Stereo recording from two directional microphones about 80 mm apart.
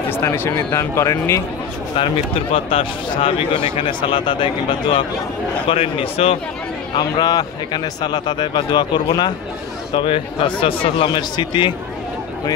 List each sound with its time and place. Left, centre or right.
0.1 s speech: left
2.0 s speech: left
7.0 s a man's voice: left
9.9 s speech: left